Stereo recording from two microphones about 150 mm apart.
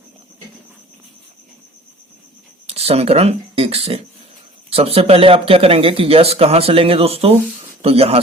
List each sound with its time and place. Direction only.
2.6 s speech: 40° right (ahead or behind)